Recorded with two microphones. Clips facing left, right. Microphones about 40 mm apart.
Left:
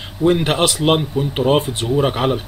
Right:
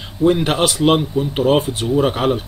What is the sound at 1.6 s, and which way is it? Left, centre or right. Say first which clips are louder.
Speech: right 1 dB; left.